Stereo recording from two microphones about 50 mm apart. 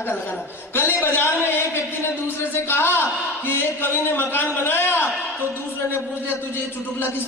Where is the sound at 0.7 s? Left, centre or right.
Left.